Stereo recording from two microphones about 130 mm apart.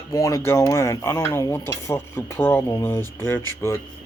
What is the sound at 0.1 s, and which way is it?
Speech, 25° left (ahead or behind).